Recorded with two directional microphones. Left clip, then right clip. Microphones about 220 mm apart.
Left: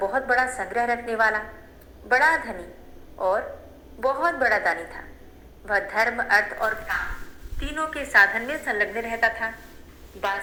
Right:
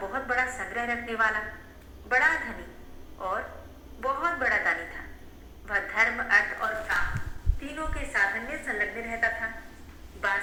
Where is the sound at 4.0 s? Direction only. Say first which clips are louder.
Left 5 dB; 15° left (ahead or behind).